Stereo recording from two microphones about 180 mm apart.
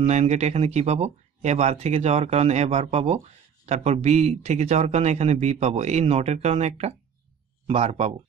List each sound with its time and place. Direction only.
0.0 s speech: 35° right (ahead or behind)